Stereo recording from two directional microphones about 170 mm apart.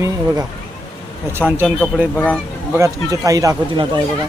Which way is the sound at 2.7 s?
20° right (ahead or behind).